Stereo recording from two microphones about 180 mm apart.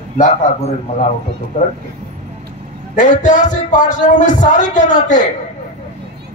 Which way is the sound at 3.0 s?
45° left (ahead or behind).